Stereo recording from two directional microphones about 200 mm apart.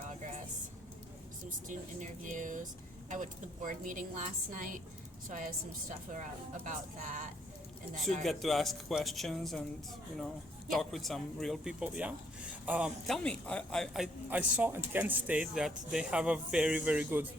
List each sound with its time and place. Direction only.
1.5 s a woman's voice: 40° right (ahead or behind)
6.7 s a woman's voice: 40° right (ahead or behind)
8.2 s speech: centre (ahead or behind)
10.7 s speech: centre (ahead or behind)